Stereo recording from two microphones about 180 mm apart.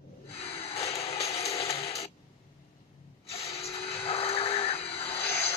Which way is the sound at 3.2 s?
35° left (ahead or behind).